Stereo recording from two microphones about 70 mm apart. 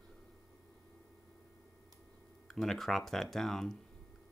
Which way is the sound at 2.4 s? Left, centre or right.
Centre.